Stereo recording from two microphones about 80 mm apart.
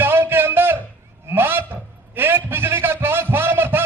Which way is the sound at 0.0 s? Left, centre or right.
Right.